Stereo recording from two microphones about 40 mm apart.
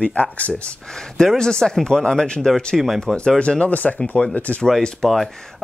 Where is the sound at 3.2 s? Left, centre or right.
Left.